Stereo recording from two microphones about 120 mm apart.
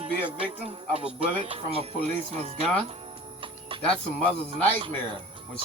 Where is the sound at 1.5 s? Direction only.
55° right (ahead or behind).